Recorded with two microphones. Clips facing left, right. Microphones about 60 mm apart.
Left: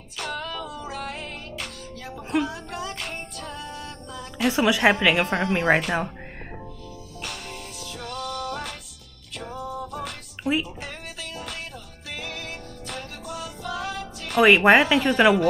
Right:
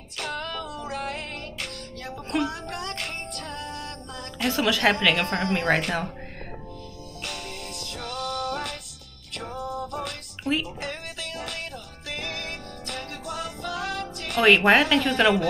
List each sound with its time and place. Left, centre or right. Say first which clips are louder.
0.2 s music: even; centre
4.5 s speech: left 3 dB; centre
7.4 s music: even; right
9.6 s music: right 1 dB; centre
12.4 s music: right 1 dB; centre
12.9 s music: right 1 dB; right
14.4 s speech: left 2 dB; centre